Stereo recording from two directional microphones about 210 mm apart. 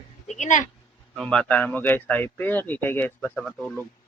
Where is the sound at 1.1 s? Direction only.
5° left (ahead or behind).